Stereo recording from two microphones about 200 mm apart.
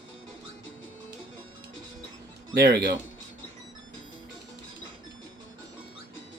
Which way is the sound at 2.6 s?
50° right (ahead or behind).